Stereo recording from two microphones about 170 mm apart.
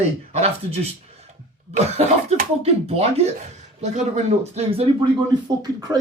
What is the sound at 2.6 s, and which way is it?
Speech, 35° right (ahead or behind).